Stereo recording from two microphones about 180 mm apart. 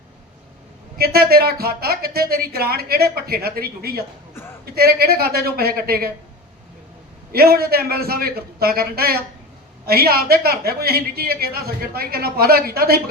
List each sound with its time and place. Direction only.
0.9 s a woman's voice: 60° right (ahead or behind)
7.3 s a woman's voice: 60° right (ahead or behind)